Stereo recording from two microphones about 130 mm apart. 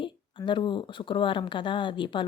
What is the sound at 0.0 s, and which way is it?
Speech, 40° left (ahead or behind).